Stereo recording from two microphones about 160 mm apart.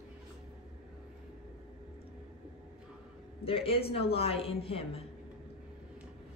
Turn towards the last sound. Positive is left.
turn(degrees=35)  # may be behind; listen again after turning